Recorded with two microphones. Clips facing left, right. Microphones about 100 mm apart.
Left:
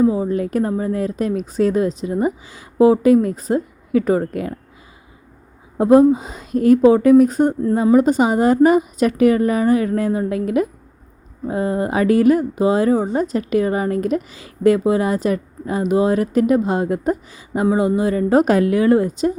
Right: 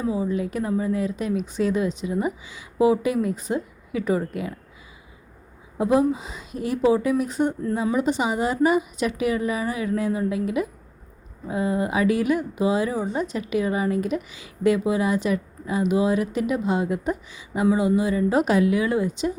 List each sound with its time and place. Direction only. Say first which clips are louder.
0.0 s speech: left 8 dB; 40° left (ahead or behind)
5.7 s speech: left 9 dB; 45° left (ahead or behind)